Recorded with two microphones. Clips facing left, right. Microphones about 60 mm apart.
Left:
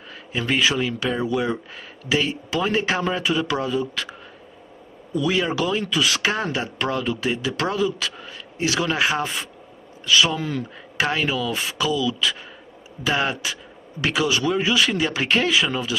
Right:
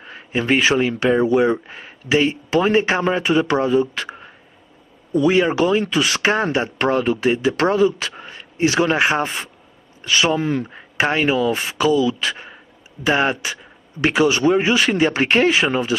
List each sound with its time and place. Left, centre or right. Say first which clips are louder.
0.1 s a sound: right 5 dB; right
0.6 s speech: right 5 dB; right
5.1 s speech: right 6 dB; right